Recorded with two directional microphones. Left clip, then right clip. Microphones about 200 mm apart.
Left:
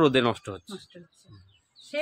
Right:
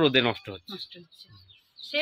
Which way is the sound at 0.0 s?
15° left (ahead or behind).